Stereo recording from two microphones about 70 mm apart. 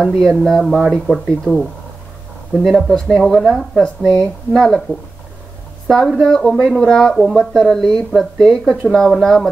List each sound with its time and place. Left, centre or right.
0.0 s speech: centre
1.5 s speech: left
2.5 s speech: centre
3.8 s speech: centre
5.9 s speech: centre